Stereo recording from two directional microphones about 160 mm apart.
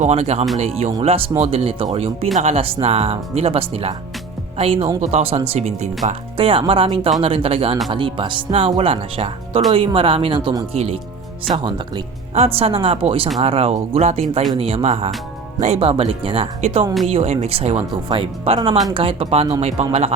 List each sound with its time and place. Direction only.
0.0 s speech: 40° right (ahead or behind)